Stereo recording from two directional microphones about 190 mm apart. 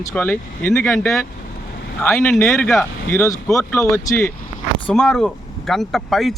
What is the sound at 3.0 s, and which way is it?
Speech, 15° left (ahead or behind).